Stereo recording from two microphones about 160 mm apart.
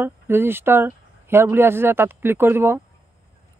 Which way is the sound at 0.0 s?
15° right (ahead or behind).